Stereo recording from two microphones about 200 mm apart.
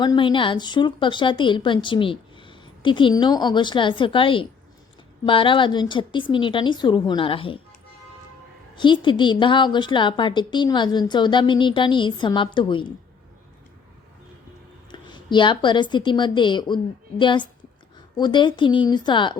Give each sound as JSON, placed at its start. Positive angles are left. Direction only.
{"t": 0.0, "sound": "speech", "side_deg": 20}
{"t": 8.7, "sound": "speech", "side_deg": 25}
{"t": 14.9, "sound": "speech", "side_deg": 25}